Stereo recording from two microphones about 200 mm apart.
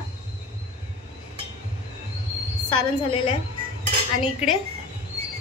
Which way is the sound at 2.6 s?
25° left (ahead or behind).